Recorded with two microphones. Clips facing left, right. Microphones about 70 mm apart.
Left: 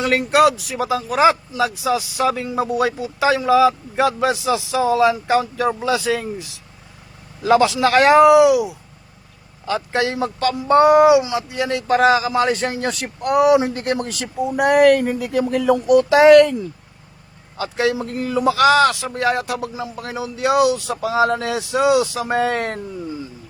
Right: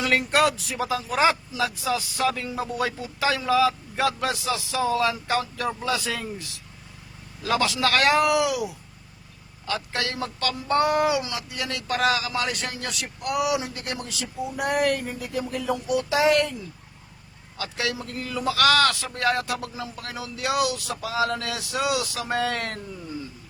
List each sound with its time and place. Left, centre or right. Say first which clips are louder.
0.0 s a man's voice: left 6 dB; centre
7.4 s speech: left 9 dB; left
17.6 s speech: left 9 dB; left